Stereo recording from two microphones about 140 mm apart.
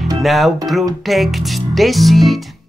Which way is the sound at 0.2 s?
Centre (ahead or behind).